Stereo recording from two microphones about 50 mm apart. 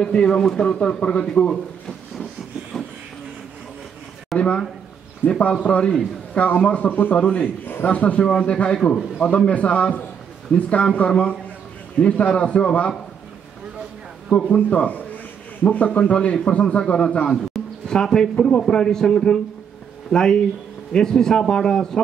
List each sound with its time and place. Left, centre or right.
0.0 s a man's voice: centre
4.3 s speech: centre
5.4 s a man's voice: left
8.7 s a man's voice: centre
9.5 s a man's voice: left
14.3 s a man's voice: left